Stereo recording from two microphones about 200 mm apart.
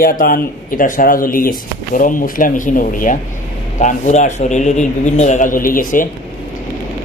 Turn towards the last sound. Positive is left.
turn(degrees=45)  # may be behind; listen again after turning